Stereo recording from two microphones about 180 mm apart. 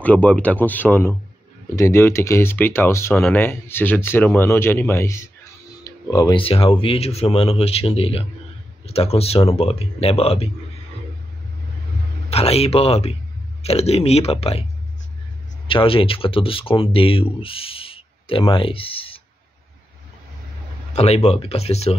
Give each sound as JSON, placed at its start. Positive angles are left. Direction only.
{"t": 0.0, "sound": "speech", "side_deg": 10}
{"t": 12.3, "sound": "speech", "side_deg": 35}
{"t": 15.7, "sound": "speech", "side_deg": 30}
{"t": 20.9, "sound": "speech", "side_deg": 35}